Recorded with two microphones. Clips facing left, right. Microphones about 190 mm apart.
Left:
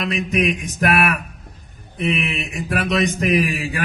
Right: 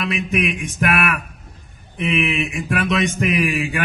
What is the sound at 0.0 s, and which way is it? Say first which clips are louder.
A man's voice: left 1 dB; 35° left (ahead or behind).